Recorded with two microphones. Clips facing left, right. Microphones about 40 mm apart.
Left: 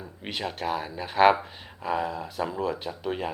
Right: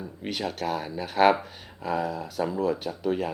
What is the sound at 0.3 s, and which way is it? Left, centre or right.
Speech, left.